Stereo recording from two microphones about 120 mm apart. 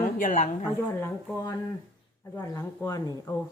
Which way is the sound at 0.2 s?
90° left.